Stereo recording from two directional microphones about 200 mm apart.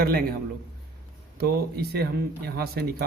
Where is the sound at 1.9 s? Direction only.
55° right (ahead or behind).